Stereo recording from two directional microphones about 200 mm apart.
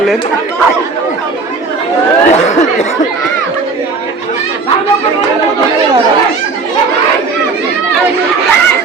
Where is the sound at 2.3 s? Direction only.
35° left (ahead or behind).